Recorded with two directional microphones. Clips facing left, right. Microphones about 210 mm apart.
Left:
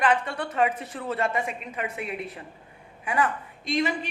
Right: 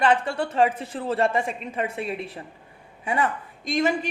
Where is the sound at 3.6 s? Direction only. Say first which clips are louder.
Right 2 dB; 45° right (ahead or behind).